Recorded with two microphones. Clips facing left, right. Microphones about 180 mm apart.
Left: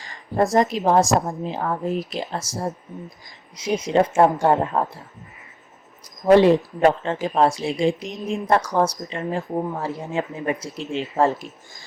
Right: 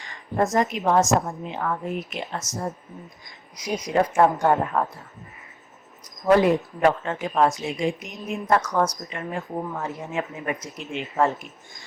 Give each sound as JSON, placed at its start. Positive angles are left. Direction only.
{"t": 0.0, "sound": "a woman's voice", "side_deg": 35}
{"t": 6.2, "sound": "speech", "side_deg": 30}